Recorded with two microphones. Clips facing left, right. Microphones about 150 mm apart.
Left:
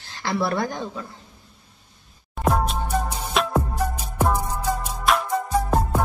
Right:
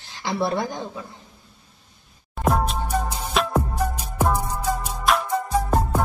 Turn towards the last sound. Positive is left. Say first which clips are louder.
# even
turn(degrees=0)  # may be behind; listen again after turning